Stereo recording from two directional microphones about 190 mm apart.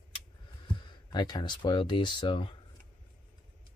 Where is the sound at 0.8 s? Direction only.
25° left (ahead or behind).